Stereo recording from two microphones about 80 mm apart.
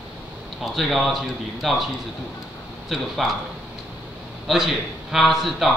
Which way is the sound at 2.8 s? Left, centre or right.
Centre.